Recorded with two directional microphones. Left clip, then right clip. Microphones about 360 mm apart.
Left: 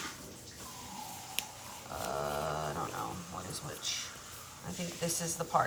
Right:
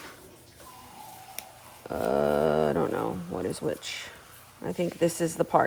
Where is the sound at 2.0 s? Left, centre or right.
Right.